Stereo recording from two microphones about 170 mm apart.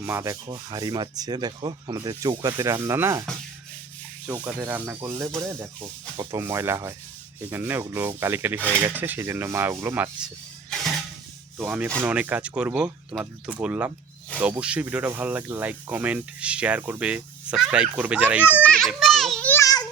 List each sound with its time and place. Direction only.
0.0 s rub: 15° right (ahead or behind)
4.4 s speech: 10° right (ahead or behind)
11.5 s speech: 5° right (ahead or behind)
18.4 s children playing: 10° left (ahead or behind)